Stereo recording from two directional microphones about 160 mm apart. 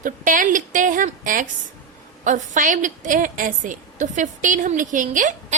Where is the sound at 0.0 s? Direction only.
55° right (ahead or behind).